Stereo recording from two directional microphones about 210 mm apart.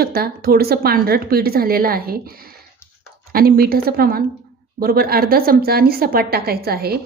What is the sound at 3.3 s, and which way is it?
A woman's voice, 45° right (ahead or behind).